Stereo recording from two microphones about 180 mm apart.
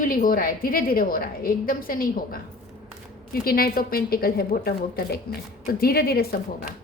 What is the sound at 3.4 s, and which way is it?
A woman's voice, 55° left (ahead or behind).